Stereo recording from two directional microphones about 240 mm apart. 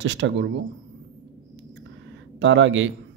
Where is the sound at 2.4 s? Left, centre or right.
Right.